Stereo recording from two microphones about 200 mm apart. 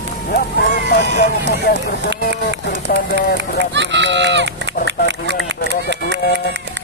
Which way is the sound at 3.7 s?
60° right (ahead or behind).